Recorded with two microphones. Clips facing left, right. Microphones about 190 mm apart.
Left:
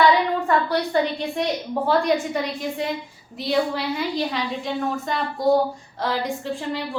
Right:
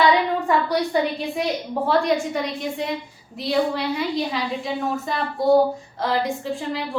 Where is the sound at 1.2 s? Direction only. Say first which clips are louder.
Even; centre (ahead or behind).